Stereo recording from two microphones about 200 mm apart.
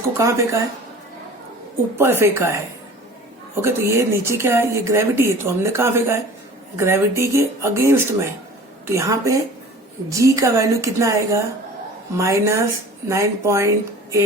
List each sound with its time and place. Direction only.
0.2 s speech: 15° right (ahead or behind)
2.0 s speech: 10° right (ahead or behind)
3.6 s speech: 15° right (ahead or behind)